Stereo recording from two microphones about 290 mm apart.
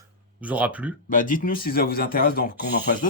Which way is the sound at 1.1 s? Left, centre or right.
Left.